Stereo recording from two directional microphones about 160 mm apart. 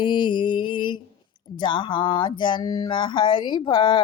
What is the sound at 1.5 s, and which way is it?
Speech, 30° left (ahead or behind).